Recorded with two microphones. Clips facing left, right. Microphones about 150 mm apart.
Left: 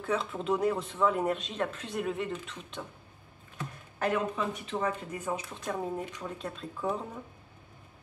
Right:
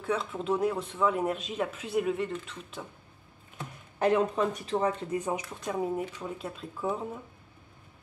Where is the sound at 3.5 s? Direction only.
20° right (ahead or behind).